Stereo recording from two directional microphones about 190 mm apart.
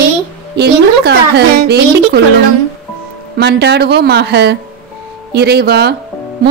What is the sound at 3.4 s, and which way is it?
Speech, 60° right (ahead or behind).